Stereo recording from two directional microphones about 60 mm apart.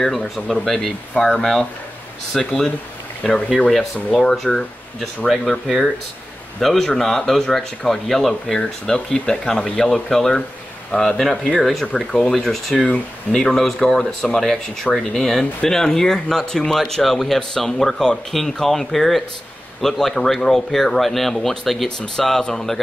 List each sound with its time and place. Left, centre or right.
0.0 s speech: centre